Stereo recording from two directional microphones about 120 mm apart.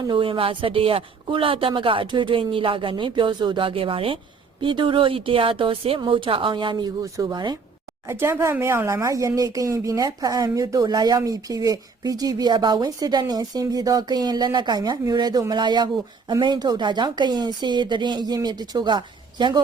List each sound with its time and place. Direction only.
0.1 s a woman's voice: 45° right (ahead or behind)
7.0 s speech: 30° right (ahead or behind)
8.0 s speech: 20° right (ahead or behind); by 19.6 s 40° right (ahead or behind)